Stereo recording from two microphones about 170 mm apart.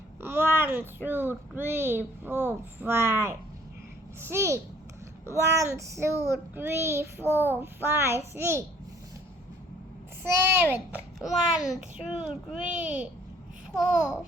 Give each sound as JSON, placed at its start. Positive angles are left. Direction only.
{"t": 0.2, "sound": "a child's voice", "side_deg": -10}
{"t": 10.4, "sound": "a child's voice", "side_deg": -15}